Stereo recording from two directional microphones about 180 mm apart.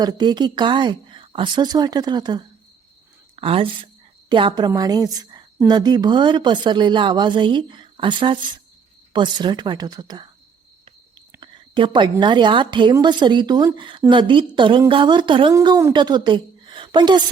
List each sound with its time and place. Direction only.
0.0 s a woman's voice: 20° right (ahead or behind)
11.3 s a sound: 25° right (ahead or behind)
12.2 s a woman's voice: 25° right (ahead or behind)